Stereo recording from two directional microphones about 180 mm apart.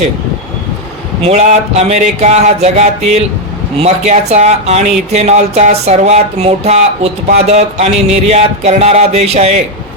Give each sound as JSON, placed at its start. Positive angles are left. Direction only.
{"t": 1.2, "sound": "speech", "side_deg": -40}